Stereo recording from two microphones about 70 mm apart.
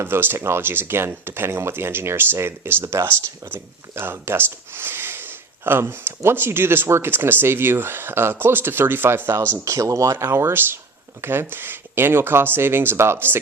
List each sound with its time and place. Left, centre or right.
0.0 s speech: right
9.6 s speech: right